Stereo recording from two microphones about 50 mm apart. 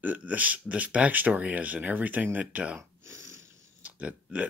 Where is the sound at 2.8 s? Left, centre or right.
Right.